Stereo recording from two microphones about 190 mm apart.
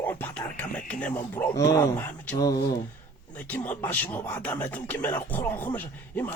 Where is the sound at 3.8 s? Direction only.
10° left (ahead or behind).